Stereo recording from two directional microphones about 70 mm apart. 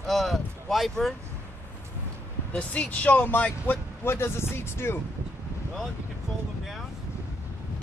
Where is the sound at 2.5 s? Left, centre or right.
Left.